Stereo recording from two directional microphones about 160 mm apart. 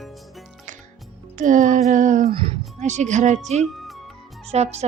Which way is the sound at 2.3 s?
35° right (ahead or behind).